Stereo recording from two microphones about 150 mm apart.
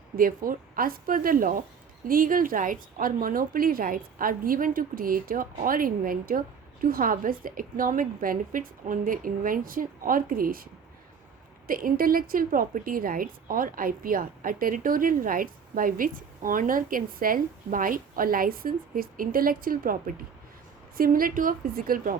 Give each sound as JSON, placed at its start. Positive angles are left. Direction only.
{"t": 0.2, "sound": "a woman's voice", "side_deg": -70}
{"t": 11.7, "sound": "a woman's voice", "side_deg": -70}